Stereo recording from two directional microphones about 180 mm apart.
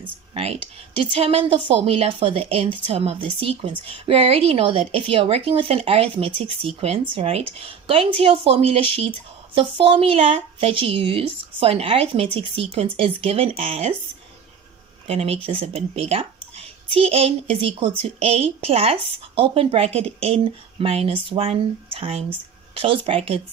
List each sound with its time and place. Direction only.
0.3 s speech: 35° right (ahead or behind)
15.0 s speech: 35° right (ahead or behind)